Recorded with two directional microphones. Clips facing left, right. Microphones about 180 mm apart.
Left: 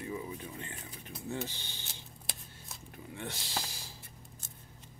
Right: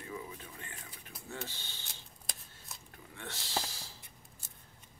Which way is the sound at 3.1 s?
15° left (ahead or behind).